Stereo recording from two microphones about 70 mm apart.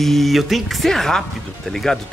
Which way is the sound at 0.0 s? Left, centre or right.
Centre.